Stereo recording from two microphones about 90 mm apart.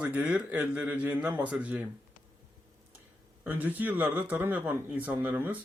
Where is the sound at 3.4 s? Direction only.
20° right (ahead or behind).